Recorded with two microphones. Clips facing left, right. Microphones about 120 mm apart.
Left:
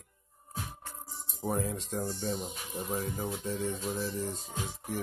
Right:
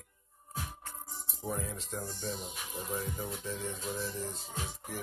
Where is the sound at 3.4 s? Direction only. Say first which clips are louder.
Left 5 dB; 30° left (ahead or behind).